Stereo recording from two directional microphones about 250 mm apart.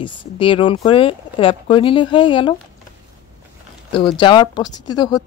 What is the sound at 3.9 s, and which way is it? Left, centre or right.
Speech, centre.